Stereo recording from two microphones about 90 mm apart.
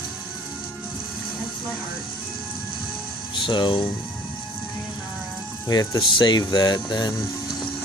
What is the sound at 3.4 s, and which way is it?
Speech, 65° left (ahead or behind).